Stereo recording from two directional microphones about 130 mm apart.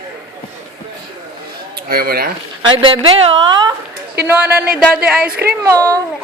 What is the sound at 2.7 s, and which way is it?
A woman's voice, 45° right (ahead or behind).